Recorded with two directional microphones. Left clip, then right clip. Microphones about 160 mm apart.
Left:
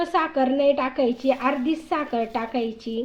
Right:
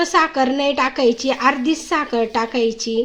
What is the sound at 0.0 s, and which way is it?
A woman's voice, 35° right (ahead or behind).